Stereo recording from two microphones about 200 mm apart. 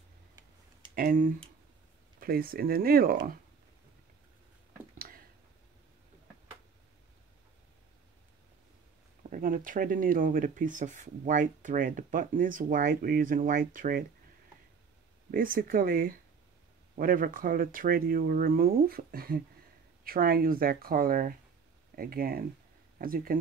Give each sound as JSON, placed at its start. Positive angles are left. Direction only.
{"t": 0.9, "sound": "speech", "side_deg": -45}
{"t": 4.9, "sound": "a sound", "side_deg": -45}
{"t": 9.3, "sound": "speech", "side_deg": -40}
{"t": 15.3, "sound": "speech", "side_deg": -45}